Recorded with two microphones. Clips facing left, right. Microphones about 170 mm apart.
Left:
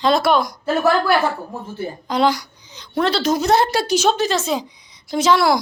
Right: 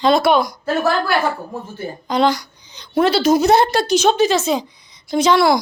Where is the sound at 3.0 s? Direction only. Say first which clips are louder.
Right 4 dB; 5° right (ahead or behind).